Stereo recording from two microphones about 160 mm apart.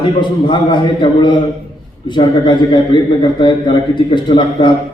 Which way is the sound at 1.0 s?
30° left (ahead or behind).